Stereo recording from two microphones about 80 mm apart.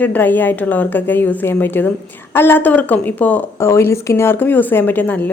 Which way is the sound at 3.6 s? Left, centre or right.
Left.